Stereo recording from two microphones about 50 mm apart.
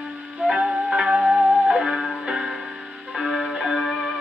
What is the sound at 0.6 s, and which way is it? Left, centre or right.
Music, centre.